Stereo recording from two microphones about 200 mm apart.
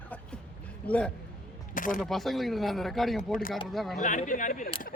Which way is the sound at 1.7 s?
40° left (ahead or behind).